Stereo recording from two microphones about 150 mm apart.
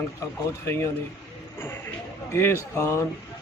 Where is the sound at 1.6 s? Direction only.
15° left (ahead or behind).